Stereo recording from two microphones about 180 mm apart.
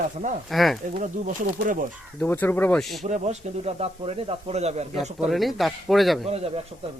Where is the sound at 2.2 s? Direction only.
10° left (ahead or behind).